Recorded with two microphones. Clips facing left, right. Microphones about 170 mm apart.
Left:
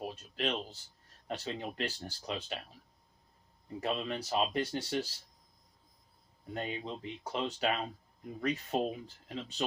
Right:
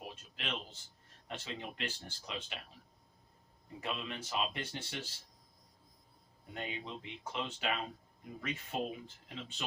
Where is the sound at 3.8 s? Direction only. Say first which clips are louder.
Left 6 dB; 40° left (ahead or behind).